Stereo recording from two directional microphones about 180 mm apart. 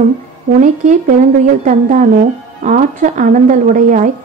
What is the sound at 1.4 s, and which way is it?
Speech, 45° right (ahead or behind).